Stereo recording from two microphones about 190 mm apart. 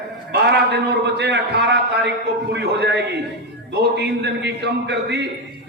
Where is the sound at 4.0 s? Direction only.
65° right (ahead or behind).